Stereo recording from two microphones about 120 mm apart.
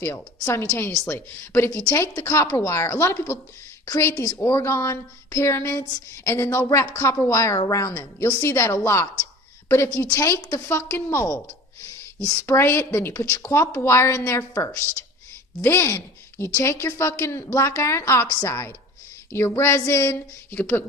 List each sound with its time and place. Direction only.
0.4 s speech: 20° left (ahead or behind)